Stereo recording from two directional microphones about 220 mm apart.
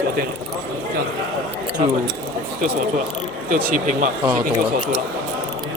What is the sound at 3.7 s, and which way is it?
Speech, 35° right (ahead or behind).